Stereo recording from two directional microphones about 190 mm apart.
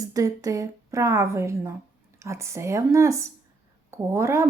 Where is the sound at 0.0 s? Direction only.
15° right (ahead or behind).